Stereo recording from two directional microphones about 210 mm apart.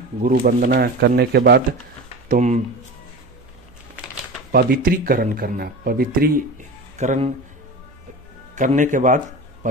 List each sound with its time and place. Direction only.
0.2 s speech: 40° right (ahead or behind)
2.2 s speech: 35° right (ahead or behind)
4.5 s speech: 45° right (ahead or behind)
8.5 s a man's voice: 35° right (ahead or behind)